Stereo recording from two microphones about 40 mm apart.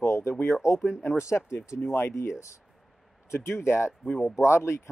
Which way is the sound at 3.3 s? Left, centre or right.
Left.